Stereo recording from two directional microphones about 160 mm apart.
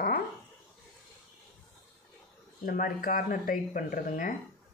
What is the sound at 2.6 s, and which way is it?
Speech, 60° left (ahead or behind).